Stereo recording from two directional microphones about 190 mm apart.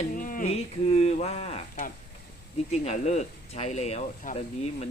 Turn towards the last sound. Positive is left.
turn(degrees=35)  # may be behind; listen again after turning